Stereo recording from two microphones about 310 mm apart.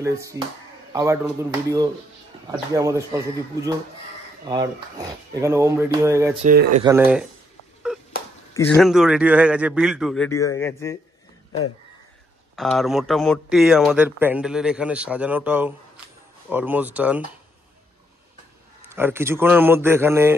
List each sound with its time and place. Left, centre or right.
0.0 s speech: centre
4.5 s speech: centre
6.4 s speech: right
6.8 s speech: centre
8.5 s speech: centre
12.5 s speech: centre
18.9 s speech: centre